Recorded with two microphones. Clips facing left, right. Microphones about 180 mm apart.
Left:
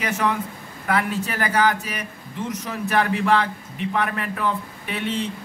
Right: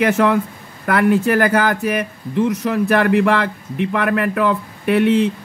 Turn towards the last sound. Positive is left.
turn(degrees=-60)  # may be behind; listen again after turning